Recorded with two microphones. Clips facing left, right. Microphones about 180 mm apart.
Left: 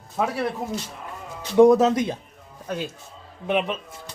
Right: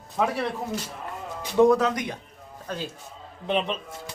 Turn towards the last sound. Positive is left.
turn(degrees=10)  # may be behind; listen again after turning